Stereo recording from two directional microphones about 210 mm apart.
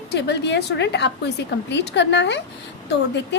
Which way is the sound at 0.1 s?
55° left (ahead or behind).